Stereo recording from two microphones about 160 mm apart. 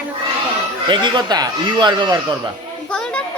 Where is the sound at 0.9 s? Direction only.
30° right (ahead or behind).